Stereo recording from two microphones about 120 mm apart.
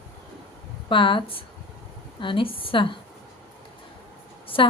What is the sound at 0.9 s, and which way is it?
Speech, 45° left (ahead or behind).